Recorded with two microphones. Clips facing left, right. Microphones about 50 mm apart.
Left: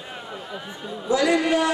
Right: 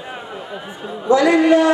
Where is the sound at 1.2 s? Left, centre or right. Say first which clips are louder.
Right 7 dB; centre.